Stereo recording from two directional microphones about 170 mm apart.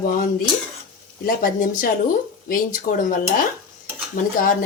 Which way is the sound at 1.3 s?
55° left (ahead or behind).